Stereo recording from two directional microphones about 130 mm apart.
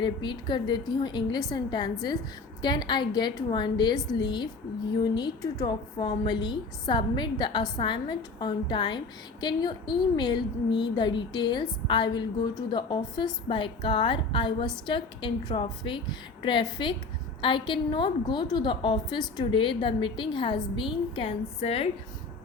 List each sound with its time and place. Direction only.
0.0 s a woman's voice: 35° left (ahead or behind)